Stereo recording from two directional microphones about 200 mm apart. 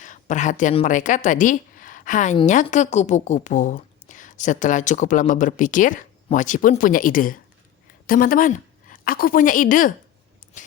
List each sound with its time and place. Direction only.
0.0 s a woman's voice: 40° left (ahead or behind)